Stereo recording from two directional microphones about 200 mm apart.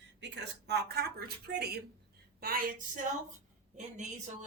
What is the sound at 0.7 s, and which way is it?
A woman's voice, 50° right (ahead or behind).